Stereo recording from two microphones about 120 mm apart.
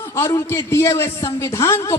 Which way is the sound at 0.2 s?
30° left (ahead or behind).